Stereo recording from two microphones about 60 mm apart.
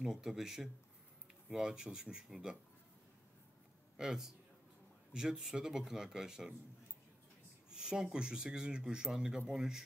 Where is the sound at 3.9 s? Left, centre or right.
Centre.